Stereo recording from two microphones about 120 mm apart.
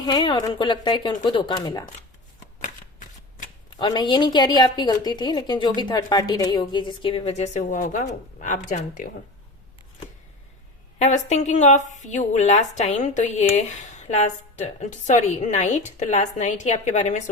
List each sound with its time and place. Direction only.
0.0 s a woman's voice: 40° left (ahead or behind)
3.8 s a woman's voice: 40° left (ahead or behind); by 9.0 s 90° left
11.0 s a woman's voice: 75° left (ahead or behind); by 13.4 s 90° left
13.4 s a woman's voice: 80° left
14.8 s a woman's voice: 85° left